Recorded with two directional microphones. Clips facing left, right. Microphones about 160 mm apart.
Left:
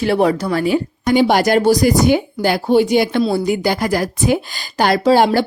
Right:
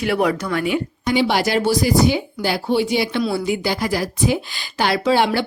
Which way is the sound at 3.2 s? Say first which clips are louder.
Left 4 dB; 35° left (ahead or behind).